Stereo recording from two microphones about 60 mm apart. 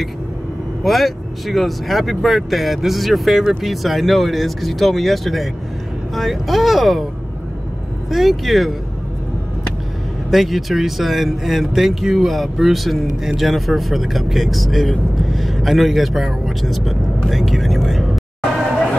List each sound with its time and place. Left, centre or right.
0.8 s speech: centre
8.1 s speech: centre
10.3 s speech: centre
17.3 s vehicle: centre